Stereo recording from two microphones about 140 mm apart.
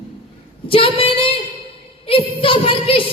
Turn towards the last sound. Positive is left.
turn(degrees=40)  # may be behind; listen again after turning